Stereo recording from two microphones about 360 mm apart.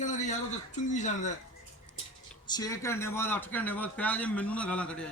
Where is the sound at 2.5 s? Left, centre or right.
Centre.